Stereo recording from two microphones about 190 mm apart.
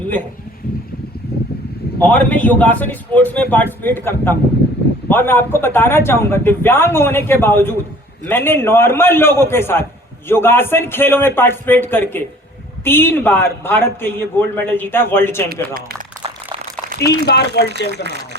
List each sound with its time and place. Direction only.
2.0 s speech: 10° left (ahead or behind)
17.2 s speech: 60° left (ahead or behind)